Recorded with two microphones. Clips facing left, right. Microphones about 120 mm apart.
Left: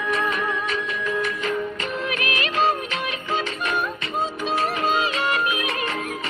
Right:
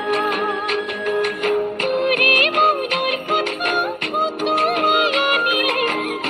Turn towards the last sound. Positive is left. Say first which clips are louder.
# right 4 dB
turn(degrees=-65)  # may be behind; listen again after turning